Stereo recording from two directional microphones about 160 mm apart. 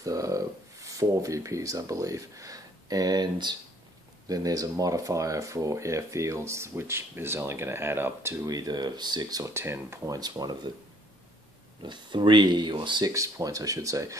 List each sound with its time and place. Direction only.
0.0 s speech: 20° right (ahead or behind)
11.8 s speech: 30° right (ahead or behind)